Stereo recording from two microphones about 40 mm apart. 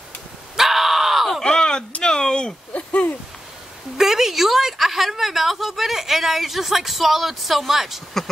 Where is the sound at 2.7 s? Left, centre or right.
Left.